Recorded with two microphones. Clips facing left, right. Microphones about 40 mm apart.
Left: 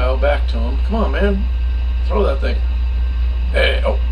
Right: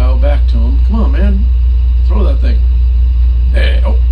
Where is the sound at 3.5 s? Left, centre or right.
Left.